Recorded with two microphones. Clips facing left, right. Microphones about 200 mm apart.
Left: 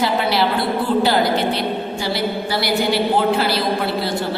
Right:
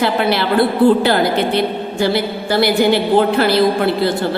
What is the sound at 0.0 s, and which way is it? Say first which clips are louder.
A woman's voice: right 2 dB; 60° right (ahead or behind).